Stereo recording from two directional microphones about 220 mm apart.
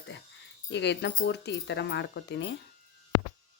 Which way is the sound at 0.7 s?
50° left (ahead or behind).